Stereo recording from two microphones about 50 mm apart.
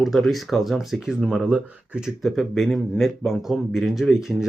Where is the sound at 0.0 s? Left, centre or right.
Centre.